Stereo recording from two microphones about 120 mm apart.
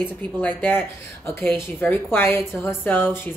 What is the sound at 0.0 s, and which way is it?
Speech, 15° left (ahead or behind).